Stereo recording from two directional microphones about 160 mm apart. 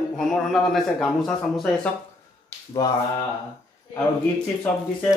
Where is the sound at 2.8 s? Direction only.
20° left (ahead or behind).